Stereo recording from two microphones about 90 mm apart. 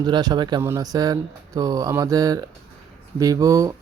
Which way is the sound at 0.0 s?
50° right (ahead or behind).